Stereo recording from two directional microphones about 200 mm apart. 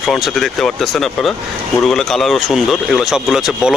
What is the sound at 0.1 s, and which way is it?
Speech, centre (ahead or behind).